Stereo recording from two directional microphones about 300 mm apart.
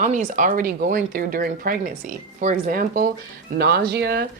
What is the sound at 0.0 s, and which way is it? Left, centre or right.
Speech, right.